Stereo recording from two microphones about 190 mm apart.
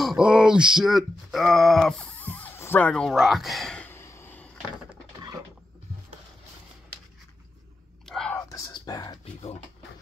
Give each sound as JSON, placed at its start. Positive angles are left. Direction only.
{"t": 0.0, "sound": "speech", "side_deg": -5}
{"t": 8.0, "sound": "whispering", "side_deg": 5}
{"t": 8.4, "sound": "whispering", "side_deg": 20}
{"t": 9.2, "sound": "speech", "side_deg": 30}